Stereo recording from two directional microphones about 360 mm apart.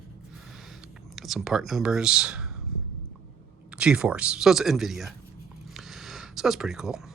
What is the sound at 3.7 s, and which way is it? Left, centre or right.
Speech, centre.